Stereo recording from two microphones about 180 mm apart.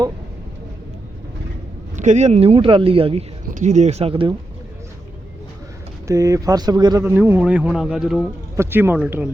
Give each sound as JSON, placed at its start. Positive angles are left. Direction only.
{"t": 2.0, "sound": "a man's voice", "side_deg": -40}
{"t": 3.5, "sound": "a man's voice", "side_deg": -40}
{"t": 6.1, "sound": "speech", "side_deg": -20}
{"t": 8.5, "sound": "speech", "side_deg": -15}